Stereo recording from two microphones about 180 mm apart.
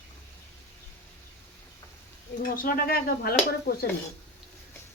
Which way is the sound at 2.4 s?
50° left (ahead or behind).